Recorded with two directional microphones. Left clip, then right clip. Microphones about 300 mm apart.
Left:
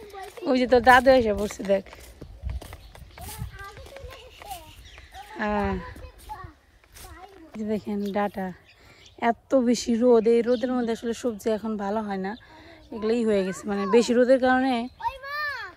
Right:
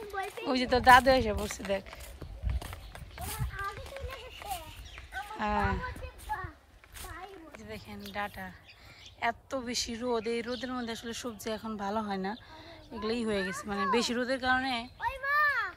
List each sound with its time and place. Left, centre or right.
0.1 s speech: centre
2.4 s a sound: centre
5.3 s speech: centre
7.5 s speech: centre
15.0 s children playing: centre